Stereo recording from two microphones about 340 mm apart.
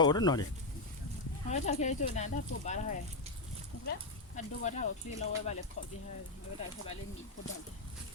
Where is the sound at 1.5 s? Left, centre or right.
Centre.